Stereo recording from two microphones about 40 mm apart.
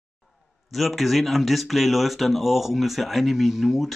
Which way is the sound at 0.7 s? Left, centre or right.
Centre.